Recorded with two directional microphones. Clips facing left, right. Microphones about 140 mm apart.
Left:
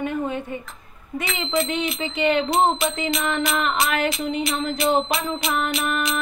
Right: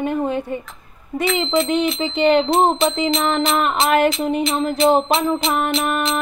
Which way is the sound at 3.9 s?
40° right (ahead or behind).